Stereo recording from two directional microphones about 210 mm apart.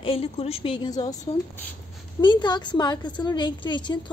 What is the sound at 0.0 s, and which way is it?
A woman's voice, 25° left (ahead or behind).